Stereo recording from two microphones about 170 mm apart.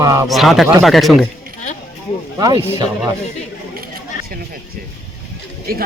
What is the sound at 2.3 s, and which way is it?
Speech, 25° right (ahead or behind).